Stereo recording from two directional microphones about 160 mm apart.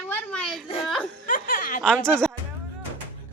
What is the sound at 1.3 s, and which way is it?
Snicker, 55° left (ahead or behind).